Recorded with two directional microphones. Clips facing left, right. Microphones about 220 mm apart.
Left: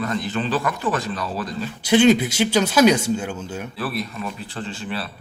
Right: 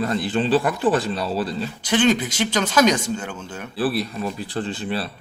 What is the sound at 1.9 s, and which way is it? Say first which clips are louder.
Speech: left 4 dB; 10° left (ahead or behind).